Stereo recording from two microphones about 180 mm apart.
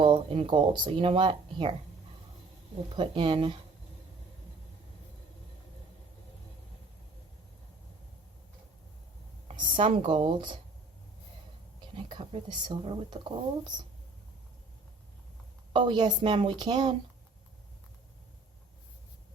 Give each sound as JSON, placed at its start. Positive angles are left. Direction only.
{"t": 0.0, "sound": "speech", "side_deg": -30}
{"t": 2.9, "sound": "speech", "side_deg": -30}
{"t": 9.5, "sound": "a sound", "side_deg": -30}
{"t": 9.8, "sound": "speech", "side_deg": -30}
{"t": 12.0, "sound": "speech", "side_deg": -30}
{"t": 15.7, "sound": "speech", "side_deg": -25}